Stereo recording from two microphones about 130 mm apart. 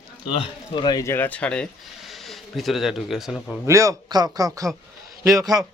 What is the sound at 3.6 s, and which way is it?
A man's voice, 25° right (ahead or behind).